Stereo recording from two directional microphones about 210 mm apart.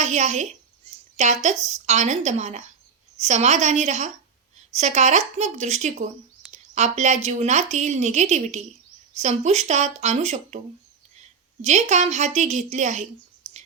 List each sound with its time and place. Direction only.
0.0 s a woman's voice: 35° right (ahead or behind)
11.6 s a woman's voice: 35° right (ahead or behind)